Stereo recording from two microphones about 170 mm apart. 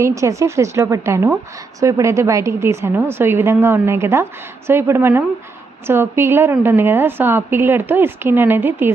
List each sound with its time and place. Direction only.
0.0 s a woman's voice: 20° right (ahead or behind)